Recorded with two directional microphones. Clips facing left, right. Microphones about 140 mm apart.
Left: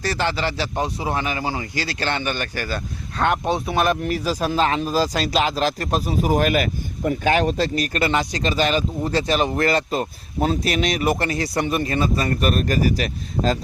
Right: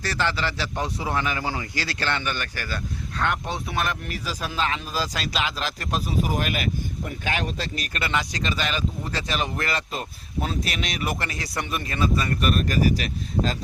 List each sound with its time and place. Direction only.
0.0 s speech: 15° left (ahead or behind)
4.1 s speech: 40° left (ahead or behind)